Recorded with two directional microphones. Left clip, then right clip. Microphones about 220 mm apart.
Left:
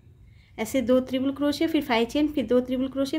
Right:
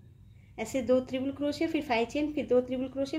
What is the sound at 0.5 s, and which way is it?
A woman's voice, 20° left (ahead or behind).